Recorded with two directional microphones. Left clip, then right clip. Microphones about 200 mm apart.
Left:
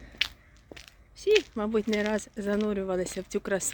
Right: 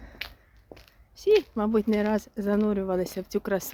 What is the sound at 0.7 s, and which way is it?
Speech, 5° right (ahead or behind).